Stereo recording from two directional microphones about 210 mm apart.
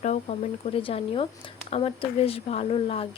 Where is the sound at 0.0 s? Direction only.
30° left (ahead or behind).